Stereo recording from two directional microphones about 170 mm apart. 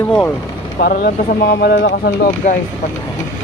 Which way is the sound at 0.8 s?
60° left (ahead or behind).